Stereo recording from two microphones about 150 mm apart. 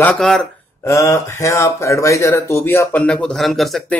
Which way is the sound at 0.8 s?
20° left (ahead or behind).